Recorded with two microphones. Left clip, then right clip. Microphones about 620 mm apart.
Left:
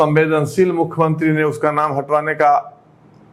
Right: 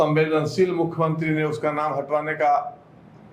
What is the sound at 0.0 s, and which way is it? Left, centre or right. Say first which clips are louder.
A man's voice: left 5 dB; left.